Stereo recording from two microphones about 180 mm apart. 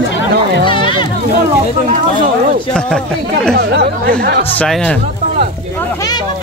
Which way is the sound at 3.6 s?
65° right (ahead or behind).